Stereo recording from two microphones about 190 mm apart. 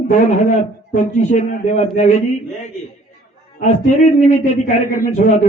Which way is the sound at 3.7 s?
40° left (ahead or behind).